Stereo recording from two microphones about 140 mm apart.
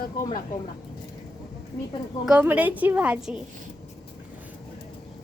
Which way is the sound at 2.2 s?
10° right (ahead or behind).